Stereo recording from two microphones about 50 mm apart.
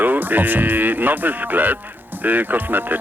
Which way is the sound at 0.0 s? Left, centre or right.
Right.